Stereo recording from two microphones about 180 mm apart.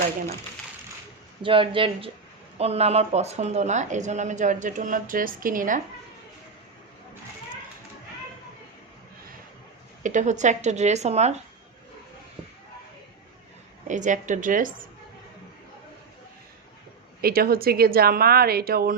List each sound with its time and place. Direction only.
1.4 s a man's voice: 30° right (ahead or behind); by 5.8 s 50° right (ahead or behind)
10.0 s speech: 45° right (ahead or behind)
13.8 s a woman's voice: 45° right (ahead or behind)
17.2 s speech: 55° right (ahead or behind)